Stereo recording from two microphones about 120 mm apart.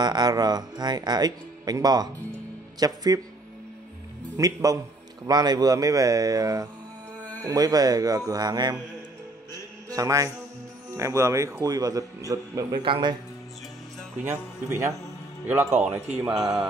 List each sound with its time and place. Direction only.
0.0 s speech: 35° right (ahead or behind)
4.4 s a man's voice: 30° right (ahead or behind)
9.5 s mantra: 30° right (ahead or behind)
11.0 s a man's voice: 25° right (ahead or behind)
12.8 s speech: 40° right (ahead or behind)
14.2 s a man's voice: 20° right (ahead or behind); by 16.6 s 5° right (ahead or behind)